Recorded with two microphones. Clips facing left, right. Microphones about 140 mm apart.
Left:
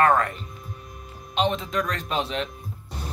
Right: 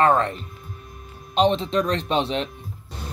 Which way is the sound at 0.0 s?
25° right (ahead or behind).